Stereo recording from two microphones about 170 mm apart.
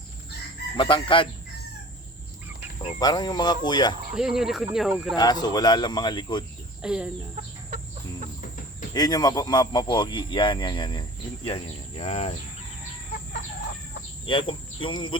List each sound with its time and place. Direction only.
0.8 s speech: 30° left (ahead or behind)
2.8 s speech: 25° left (ahead or behind)
4.1 s speech: 5° right (ahead or behind)
5.1 s speech: 25° left (ahead or behind)
6.8 s speech: 5° right (ahead or behind)
8.9 s speech: 25° left (ahead or behind); by 12.3 s 40° left (ahead or behind)
14.3 s speech: 30° left (ahead or behind)